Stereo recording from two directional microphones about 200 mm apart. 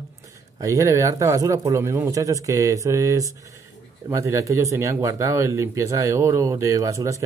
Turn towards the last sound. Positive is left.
turn(degrees=-15)  # may be behind; listen again after turning